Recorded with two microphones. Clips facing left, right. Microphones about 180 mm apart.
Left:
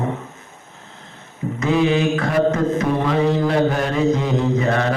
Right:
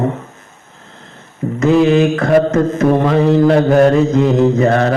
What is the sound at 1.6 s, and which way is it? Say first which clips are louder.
Mantra: right 7 dB; 50° right (ahead or behind).